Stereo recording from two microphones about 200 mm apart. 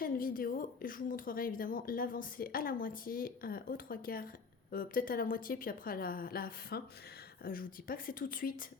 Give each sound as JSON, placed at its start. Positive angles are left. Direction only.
{"t": 0.0, "sound": "a woman's voice", "side_deg": 45}